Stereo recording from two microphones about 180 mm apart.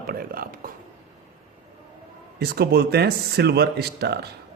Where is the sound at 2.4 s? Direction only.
65° right (ahead or behind).